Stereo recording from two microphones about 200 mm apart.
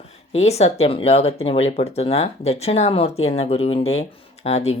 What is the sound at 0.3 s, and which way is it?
Speech, 30° left (ahead or behind).